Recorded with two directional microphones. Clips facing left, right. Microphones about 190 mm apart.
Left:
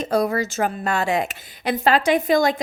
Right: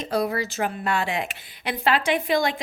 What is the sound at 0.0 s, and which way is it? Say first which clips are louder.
A woman's voice: left 4 dB; 45° left (ahead or behind).